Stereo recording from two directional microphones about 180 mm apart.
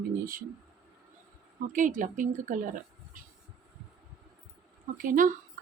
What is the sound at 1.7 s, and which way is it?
Speech, 45° right (ahead or behind).